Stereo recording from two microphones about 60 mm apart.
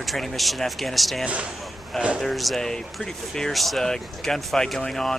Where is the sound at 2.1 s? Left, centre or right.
Centre.